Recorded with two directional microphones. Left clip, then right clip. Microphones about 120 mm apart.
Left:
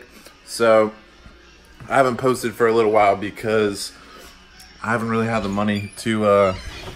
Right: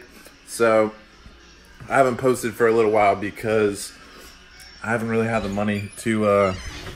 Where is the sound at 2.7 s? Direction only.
35° left (ahead or behind).